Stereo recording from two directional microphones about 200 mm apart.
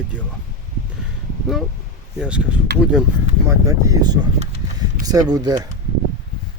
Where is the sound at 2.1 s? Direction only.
5° right (ahead or behind).